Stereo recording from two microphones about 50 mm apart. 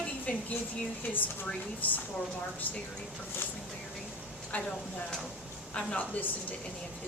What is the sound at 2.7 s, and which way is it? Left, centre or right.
Speech, left.